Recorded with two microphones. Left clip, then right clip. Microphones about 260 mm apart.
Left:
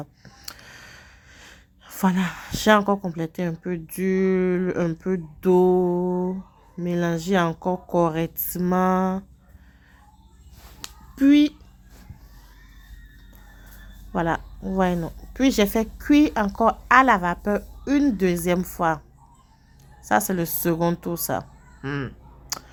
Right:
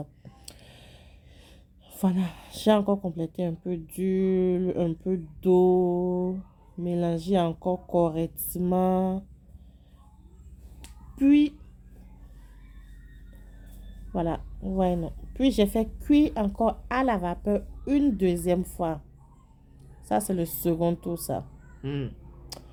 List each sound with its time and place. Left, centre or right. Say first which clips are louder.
0.3 s a sound: left 9 dB; centre
3.1 s speech: left 2 dB; centre
5.6 s mantra: left 3 dB; left
6.7 s speech: left 3 dB; centre
11.1 s speech: left 4 dB; centre
14.1 s speech: left 5 dB; centre
20.1 s speech: left 5 dB; centre